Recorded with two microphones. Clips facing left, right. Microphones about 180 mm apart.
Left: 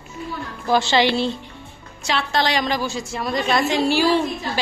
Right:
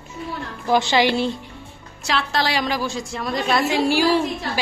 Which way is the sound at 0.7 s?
15° right (ahead or behind).